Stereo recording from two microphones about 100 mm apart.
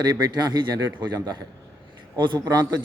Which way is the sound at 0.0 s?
45° right (ahead or behind).